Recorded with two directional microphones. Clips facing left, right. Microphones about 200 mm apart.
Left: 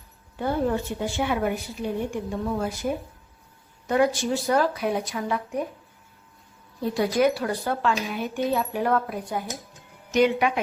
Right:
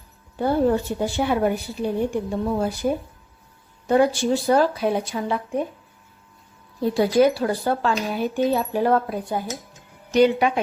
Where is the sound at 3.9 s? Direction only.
30° right (ahead or behind).